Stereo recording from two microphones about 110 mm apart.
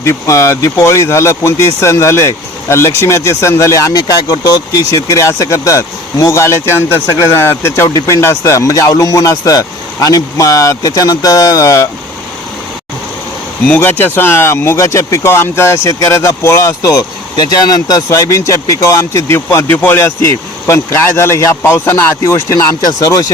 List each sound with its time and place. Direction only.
0.0 s speech: 25° left (ahead or behind)
7.9 s speech: 35° left (ahead or behind)
13.7 s speech: 15° left (ahead or behind)